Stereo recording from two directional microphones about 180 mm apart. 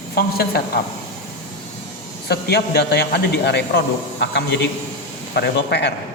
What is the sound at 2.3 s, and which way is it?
A man's voice, 65° left (ahead or behind).